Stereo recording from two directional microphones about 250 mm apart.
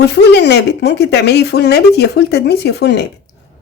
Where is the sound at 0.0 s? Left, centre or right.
Left.